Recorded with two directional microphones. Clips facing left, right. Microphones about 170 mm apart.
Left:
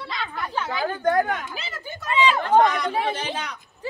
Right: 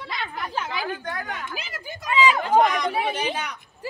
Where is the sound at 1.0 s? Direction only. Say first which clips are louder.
Left 11 dB; 50° left (ahead or behind).